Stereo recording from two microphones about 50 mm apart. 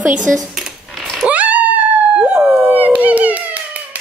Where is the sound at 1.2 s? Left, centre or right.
Right.